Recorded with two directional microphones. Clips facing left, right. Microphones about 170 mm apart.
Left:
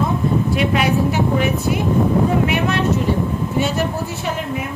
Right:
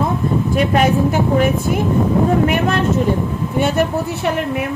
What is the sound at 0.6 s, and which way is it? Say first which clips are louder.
A woman's voice: right 6 dB; 45° right (ahead or behind).